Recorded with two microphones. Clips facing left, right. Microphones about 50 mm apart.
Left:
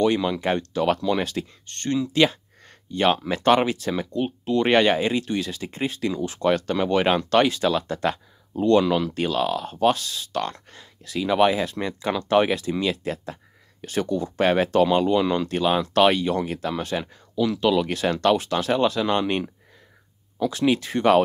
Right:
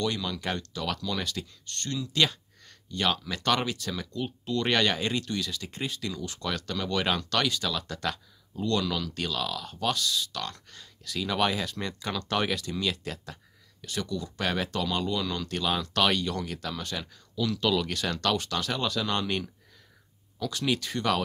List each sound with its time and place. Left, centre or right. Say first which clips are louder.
0.0 s speech: left 9 dB; left